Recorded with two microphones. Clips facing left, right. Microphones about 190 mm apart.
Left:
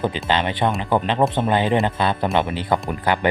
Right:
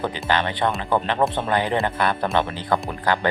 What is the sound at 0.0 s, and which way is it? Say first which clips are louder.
Speech: left 2 dB; 20° left (ahead or behind).